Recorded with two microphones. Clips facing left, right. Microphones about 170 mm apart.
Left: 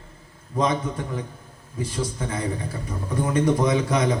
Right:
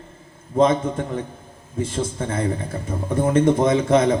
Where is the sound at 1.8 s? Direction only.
25° right (ahead or behind).